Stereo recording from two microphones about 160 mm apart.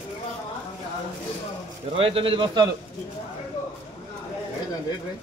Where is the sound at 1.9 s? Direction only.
35° right (ahead or behind).